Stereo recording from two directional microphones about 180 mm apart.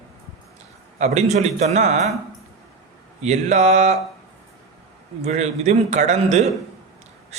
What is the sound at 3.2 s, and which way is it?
Speech, 40° right (ahead or behind).